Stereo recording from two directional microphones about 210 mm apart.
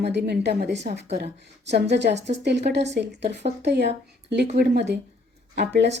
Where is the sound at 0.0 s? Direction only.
50° right (ahead or behind).